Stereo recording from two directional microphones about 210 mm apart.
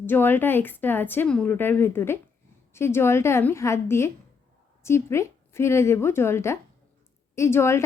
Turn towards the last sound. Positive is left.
turn(degrees=15)  # may be behind; listen again after turning